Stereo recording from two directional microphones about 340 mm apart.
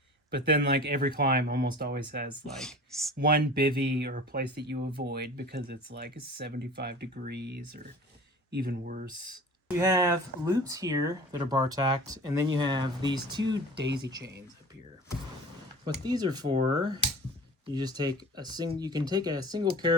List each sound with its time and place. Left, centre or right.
0.3 s speech: right
2.6 s speech: centre
3.2 s speech: right
9.6 s speech: centre
13.8 s speech: right
16.0 s speech: centre